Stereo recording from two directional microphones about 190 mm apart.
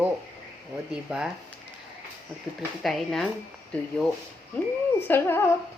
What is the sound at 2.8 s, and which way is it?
Speech, centre (ahead or behind).